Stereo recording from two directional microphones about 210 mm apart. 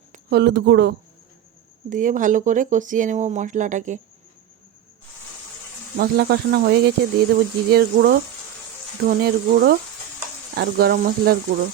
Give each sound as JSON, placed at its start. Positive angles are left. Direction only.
{"t": 0.3, "sound": "speech", "side_deg": -55}
{"t": 1.9, "sound": "speech", "side_deg": -40}
{"t": 6.0, "sound": "speech", "side_deg": -50}